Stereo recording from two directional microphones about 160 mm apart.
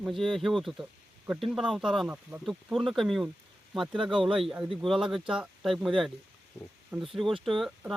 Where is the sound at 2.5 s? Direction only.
Centre (ahead or behind).